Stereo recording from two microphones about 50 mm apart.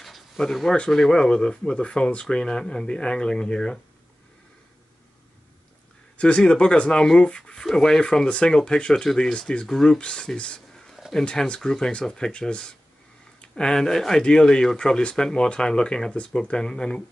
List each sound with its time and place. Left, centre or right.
0.0 s a sound: centre
0.9 s speech: centre
6.1 s speech: left